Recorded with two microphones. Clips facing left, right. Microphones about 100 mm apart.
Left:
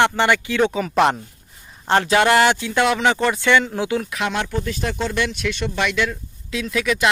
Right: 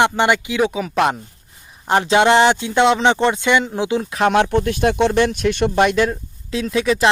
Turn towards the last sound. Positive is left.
turn(degrees=-30)  # may be behind; listen again after turning